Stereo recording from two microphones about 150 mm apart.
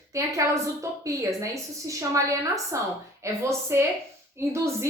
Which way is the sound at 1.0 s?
20° right (ahead or behind).